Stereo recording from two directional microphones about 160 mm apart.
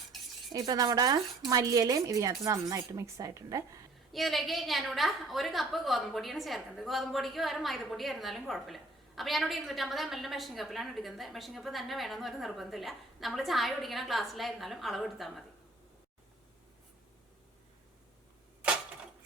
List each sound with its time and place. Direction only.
0.1 s stir: centre (ahead or behind)
0.5 s speech: 25° right (ahead or behind)
4.1 s a woman's voice: centre (ahead or behind)